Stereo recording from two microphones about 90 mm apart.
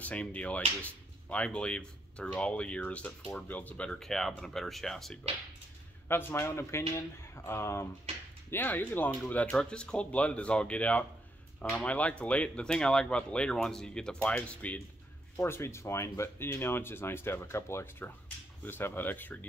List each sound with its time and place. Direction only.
0.0 s speech: 15° left (ahead or behind)
4.0 s speech: 5° left (ahead or behind)
6.0 s a man's voice: 25° left (ahead or behind)
9.5 s speech: 10° left (ahead or behind)
15.3 s speech: 30° left (ahead or behind)